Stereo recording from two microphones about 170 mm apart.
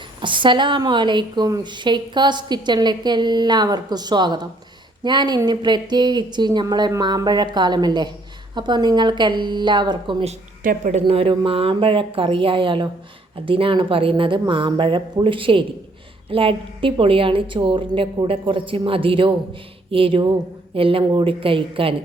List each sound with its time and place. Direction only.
0.2 s a woman's voice: 30° right (ahead or behind)
10.6 s speech: 50° right (ahead or behind)
11.0 s a woman's voice: 30° right (ahead or behind)